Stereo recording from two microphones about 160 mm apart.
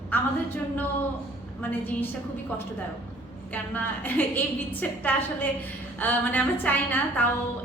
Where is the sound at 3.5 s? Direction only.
10° left (ahead or behind).